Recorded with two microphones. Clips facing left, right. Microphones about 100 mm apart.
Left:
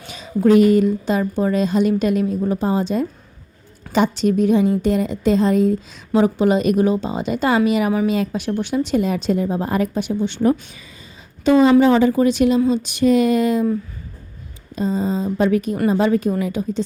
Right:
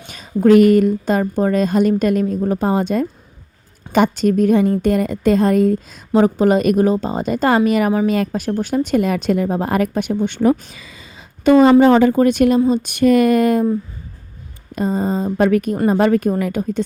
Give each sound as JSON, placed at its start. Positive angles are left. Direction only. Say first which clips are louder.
{"t": 0.1, "sound": "a woman's voice", "louder": "right 3 dB", "side_deg": -50}
{"t": 2.5, "sound": "a woman's voice", "louder": "right 2 dB", "side_deg": -60}
{"t": 6.1, "sound": "a woman's voice", "louder": "right 2 dB", "side_deg": -40}
{"t": 10.4, "sound": "speech", "louder": "right 2 dB", "side_deg": -90}
{"t": 11.4, "sound": "speech", "louder": "right 3 dB", "side_deg": -55}
{"t": 14.8, "sound": "a woman's voice", "louder": "right 2 dB", "side_deg": -55}